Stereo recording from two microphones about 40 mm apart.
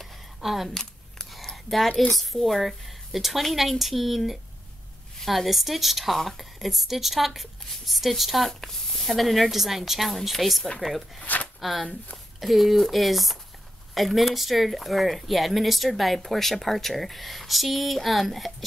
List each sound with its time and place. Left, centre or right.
0.0 s a sound: centre
2.0 s speech: centre
8.5 s speech: centre
11.3 s speech: left
11.6 s speech: centre